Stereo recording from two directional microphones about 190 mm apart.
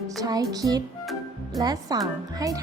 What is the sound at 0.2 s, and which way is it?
Speech, 20° right (ahead or behind).